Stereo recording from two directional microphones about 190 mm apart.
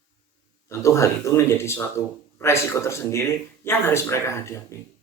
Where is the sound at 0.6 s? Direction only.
15° left (ahead or behind).